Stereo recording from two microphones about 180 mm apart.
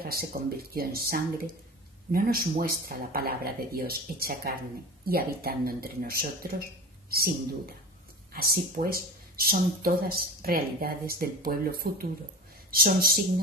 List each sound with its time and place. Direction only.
0.0 s speech: 55° right (ahead or behind)
2.6 s speech: 55° right (ahead or behind)